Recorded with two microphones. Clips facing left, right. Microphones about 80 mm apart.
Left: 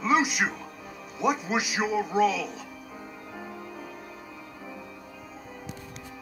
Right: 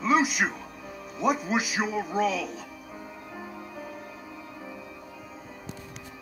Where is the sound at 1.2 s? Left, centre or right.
Centre.